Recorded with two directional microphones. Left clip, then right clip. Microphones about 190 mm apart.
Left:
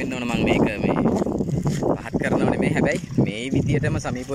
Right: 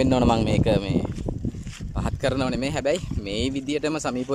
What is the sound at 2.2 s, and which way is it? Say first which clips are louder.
Speech: left 3 dB; 15° right (ahead or behind).